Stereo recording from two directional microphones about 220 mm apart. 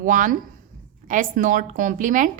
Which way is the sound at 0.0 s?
35° right (ahead or behind).